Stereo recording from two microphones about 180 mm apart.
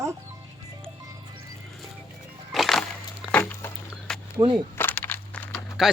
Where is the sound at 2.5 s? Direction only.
Centre (ahead or behind).